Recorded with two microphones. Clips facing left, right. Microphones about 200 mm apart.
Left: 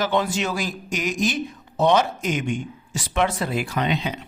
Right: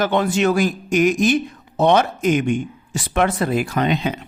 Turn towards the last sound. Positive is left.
turn(degrees=-50)  # may be behind; listen again after turning